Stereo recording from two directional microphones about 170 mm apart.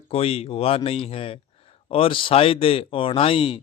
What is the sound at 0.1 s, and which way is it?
Speech, 35° left (ahead or behind).